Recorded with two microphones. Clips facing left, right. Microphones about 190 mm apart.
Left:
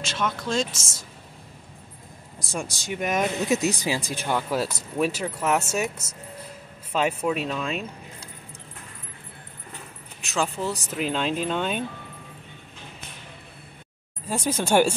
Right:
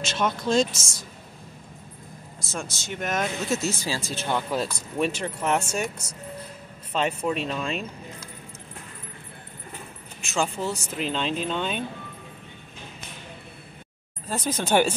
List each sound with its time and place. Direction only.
0.0 s speech: 20° right (ahead or behind)
2.5 s speech: 10° left (ahead or behind)
10.2 s speech: centre (ahead or behind)
14.3 s speech: 10° left (ahead or behind)